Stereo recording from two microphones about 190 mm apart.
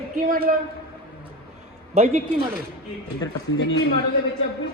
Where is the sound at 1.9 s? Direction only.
35° right (ahead or behind).